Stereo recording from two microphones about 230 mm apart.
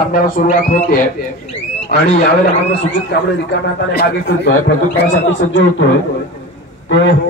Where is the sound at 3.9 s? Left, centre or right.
Left.